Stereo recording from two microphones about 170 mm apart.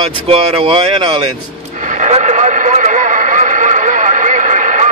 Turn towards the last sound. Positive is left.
turn(degrees=-45)  # may be behind; listen again after turning